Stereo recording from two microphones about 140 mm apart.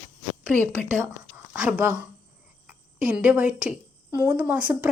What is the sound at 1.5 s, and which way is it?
A woman's voice, 10° right (ahead or behind).